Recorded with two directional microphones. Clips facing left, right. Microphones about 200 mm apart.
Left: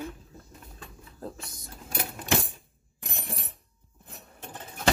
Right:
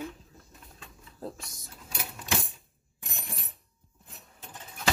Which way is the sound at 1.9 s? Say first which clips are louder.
Left 5 dB; 55° left (ahead or behind).